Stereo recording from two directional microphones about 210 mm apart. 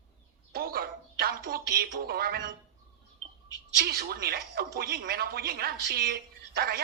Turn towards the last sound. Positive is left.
turn(degrees=-45)  # may be behind; listen again after turning